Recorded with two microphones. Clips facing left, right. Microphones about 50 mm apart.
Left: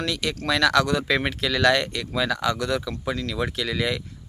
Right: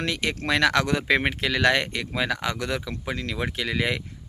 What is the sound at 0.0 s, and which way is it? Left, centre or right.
Speech, right.